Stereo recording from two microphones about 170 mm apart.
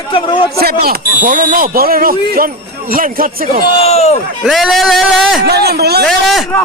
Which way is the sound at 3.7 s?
35° left (ahead or behind).